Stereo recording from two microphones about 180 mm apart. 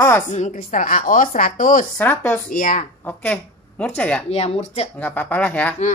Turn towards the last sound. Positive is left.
turn(degrees=10)  # may be behind; listen again after turning